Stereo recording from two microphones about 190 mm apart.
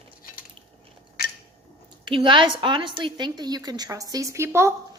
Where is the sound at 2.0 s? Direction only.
25° right (ahead or behind).